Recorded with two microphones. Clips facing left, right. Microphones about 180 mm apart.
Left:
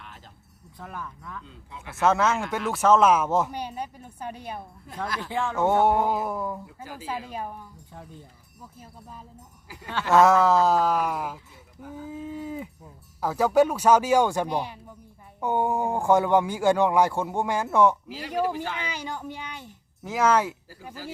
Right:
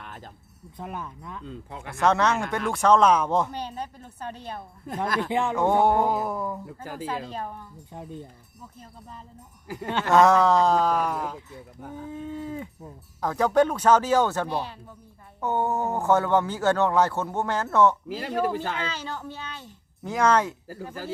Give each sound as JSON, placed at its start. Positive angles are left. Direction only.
{"t": 0.8, "sound": "speech", "side_deg": -20}
{"t": 1.5, "sound": "speech", "side_deg": -50}
{"t": 1.9, "sound": "speech", "side_deg": 0}
{"t": 5.0, "sound": "speech", "side_deg": -50}
{"t": 5.3, "sound": "speech", "side_deg": -20}
{"t": 5.6, "sound": "speech", "side_deg": 0}
{"t": 8.8, "sound": "speech", "side_deg": 5}